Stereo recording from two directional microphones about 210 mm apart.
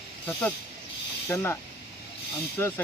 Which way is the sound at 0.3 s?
10° left (ahead or behind).